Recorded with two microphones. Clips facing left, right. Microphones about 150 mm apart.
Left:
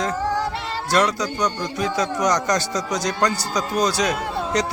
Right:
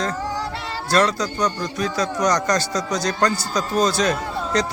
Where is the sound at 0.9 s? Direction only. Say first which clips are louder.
Right 1 dB; 15° left (ahead or behind).